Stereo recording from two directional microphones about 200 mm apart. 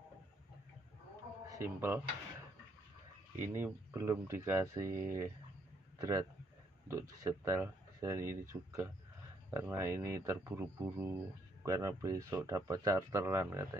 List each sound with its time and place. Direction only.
1.5 s speech: 10° right (ahead or behind)
3.3 s a man's voice: 10° right (ahead or behind)